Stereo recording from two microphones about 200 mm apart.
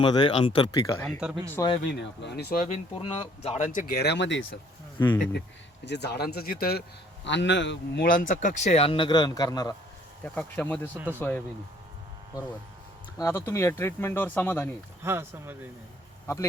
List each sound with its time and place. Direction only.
0.0 s speech: 25° left (ahead or behind)
2.0 s speech: 55° left (ahead or behind); by 2.8 s 40° left (ahead or behind)
3.0 s speech: 25° left (ahead or behind)
3.7 s speech: 45° left (ahead or behind); by 4.4 s 65° left (ahead or behind)
4.9 s speech: 10° left (ahead or behind)
5.8 s speech: 55° left (ahead or behind)
7.3 s speech: 65° left (ahead or behind)
8.0 s speech: 40° left (ahead or behind); by 9.7 s 20° left (ahead or behind)
10.2 s speech: 10° left (ahead or behind)
10.9 s speech: 10° right (ahead or behind)
11.2 s speech: 10° left (ahead or behind)
13.1 s speech: 15° left (ahead or behind)
15.0 s speech: 10° right (ahead or behind)
16.2 s a man's voice: 15° left (ahead or behind)